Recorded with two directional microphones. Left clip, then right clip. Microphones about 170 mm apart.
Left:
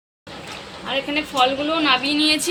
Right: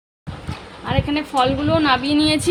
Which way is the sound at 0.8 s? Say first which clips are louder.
Right 1 dB; 75° right (ahead or behind).